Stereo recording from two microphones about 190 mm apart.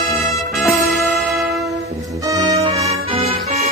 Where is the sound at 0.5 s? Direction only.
Centre (ahead or behind).